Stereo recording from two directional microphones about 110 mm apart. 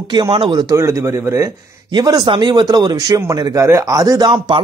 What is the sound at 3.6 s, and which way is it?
A man's voice, 25° right (ahead or behind).